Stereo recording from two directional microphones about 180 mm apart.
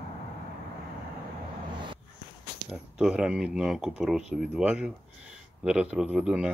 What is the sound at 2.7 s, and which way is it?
Speech, 5° right (ahead or behind).